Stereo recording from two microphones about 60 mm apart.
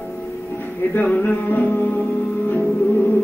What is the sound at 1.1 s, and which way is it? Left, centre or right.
Music, left.